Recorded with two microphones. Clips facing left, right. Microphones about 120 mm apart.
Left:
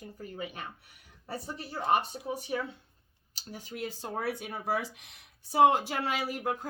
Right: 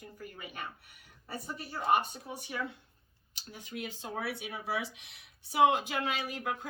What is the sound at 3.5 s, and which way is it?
Speech, 35° left (ahead or behind).